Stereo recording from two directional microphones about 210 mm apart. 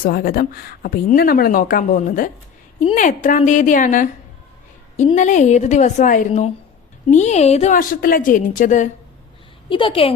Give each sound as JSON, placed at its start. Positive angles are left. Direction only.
{"t": 0.0, "sound": "a woman's voice", "side_deg": 45}
{"t": 5.1, "sound": "a woman's voice", "side_deg": 35}
{"t": 9.6, "sound": "a woman's voice", "side_deg": 25}